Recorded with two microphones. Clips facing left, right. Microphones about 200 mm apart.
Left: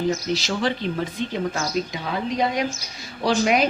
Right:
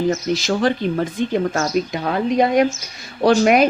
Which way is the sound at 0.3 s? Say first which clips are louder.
Right 6 dB; 50° right (ahead or behind).